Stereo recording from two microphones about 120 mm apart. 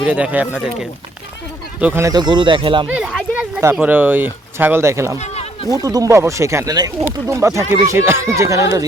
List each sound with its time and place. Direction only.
0.0 s speech: 10° right (ahead or behind)
1.8 s speech: 15° right (ahead or behind)
2.0 s speech: 35° right (ahead or behind)
2.9 s speech: 5° right (ahead or behind)
3.6 s speech: 15° right (ahead or behind)
5.2 s a sound: 65° left (ahead or behind)
5.7 s speech: 30° right (ahead or behind)